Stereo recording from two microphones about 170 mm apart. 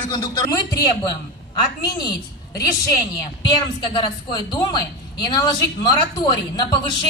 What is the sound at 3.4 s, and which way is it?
A man's voice, 25° left (ahead or behind).